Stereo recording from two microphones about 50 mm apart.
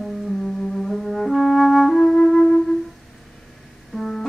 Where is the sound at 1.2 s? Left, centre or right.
Centre.